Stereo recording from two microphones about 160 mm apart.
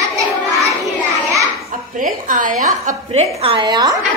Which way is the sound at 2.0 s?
60° right (ahead or behind).